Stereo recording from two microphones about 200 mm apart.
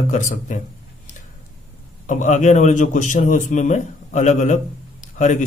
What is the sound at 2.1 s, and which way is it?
A man's voice, 40° left (ahead or behind).